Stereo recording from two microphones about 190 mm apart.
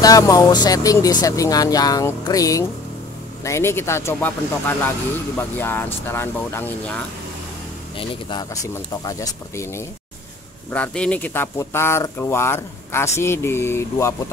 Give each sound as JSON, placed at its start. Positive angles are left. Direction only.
{"t": 0.0, "sound": "speech", "side_deg": 20}
{"t": 8.0, "sound": "speech", "side_deg": 25}
{"t": 8.6, "sound": "speech", "side_deg": 15}
{"t": 10.7, "sound": "speech", "side_deg": 5}